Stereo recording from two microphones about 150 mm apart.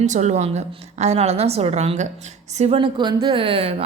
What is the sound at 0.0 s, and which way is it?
A woman's voice, 50° right (ahead or behind).